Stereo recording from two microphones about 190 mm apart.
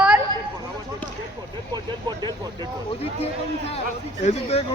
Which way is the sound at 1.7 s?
20° right (ahead or behind).